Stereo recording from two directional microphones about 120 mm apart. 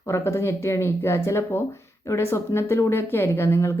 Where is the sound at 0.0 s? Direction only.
20° left (ahead or behind).